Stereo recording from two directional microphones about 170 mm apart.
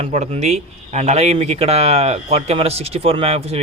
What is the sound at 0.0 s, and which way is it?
Speech, 40° right (ahead or behind).